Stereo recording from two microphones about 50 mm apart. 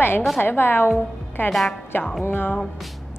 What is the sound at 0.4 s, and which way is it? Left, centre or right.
Speech, left.